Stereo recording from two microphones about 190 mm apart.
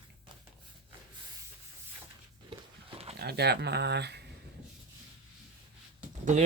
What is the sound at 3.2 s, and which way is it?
Speech, 60° right (ahead or behind).